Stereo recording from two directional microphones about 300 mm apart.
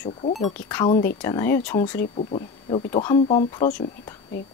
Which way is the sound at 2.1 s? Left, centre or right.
Centre.